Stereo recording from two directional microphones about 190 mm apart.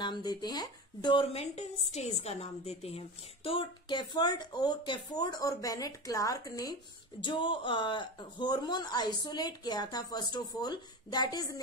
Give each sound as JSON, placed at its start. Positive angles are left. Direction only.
{"t": 0.0, "sound": "speech", "side_deg": 20}